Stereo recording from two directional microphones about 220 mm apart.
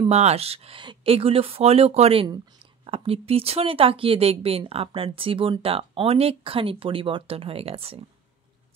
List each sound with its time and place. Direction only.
0.1 s speech: 30° right (ahead or behind)